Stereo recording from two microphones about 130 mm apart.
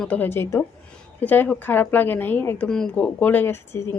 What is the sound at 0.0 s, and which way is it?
A woman's voice, 10° left (ahead or behind).